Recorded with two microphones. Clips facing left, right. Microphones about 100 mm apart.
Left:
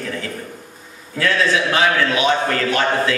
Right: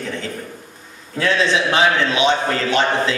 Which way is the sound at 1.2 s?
20° right (ahead or behind).